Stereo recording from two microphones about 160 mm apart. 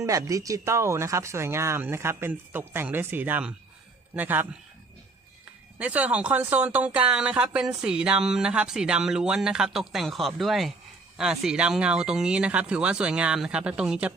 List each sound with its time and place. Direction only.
0.0 s speech: 20° right (ahead or behind)
5.8 s speech: 10° right (ahead or behind)